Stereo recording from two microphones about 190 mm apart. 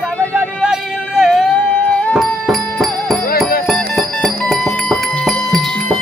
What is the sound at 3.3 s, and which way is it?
Music, 50° left (ahead or behind).